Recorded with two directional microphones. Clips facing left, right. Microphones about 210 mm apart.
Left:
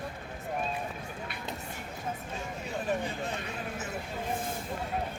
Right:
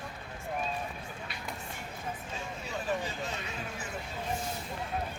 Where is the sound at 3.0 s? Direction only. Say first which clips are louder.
Left 2 dB; 55° left (ahead or behind).